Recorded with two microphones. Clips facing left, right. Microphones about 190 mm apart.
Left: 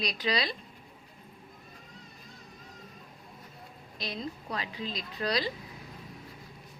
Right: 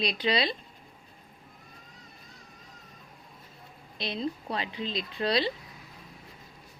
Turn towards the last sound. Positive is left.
turn(degrees=-25)  # may be behind; listen again after turning